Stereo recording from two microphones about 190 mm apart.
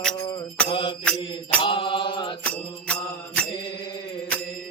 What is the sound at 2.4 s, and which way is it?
Mantra, 5° left (ahead or behind).